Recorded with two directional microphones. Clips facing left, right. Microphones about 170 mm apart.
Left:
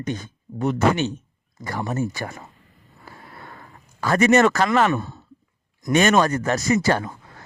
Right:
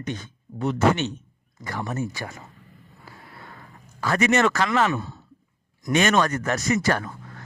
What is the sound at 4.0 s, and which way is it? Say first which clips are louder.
A man's voice: left 4 dB; 45° left (ahead or behind).